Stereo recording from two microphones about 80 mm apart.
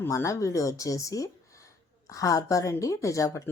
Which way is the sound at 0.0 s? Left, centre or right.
Left.